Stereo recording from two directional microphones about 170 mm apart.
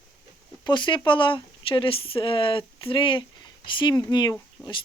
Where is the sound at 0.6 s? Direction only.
30° left (ahead or behind).